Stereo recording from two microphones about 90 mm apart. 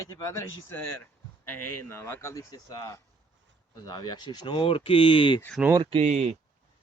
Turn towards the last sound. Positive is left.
turn(degrees=-90)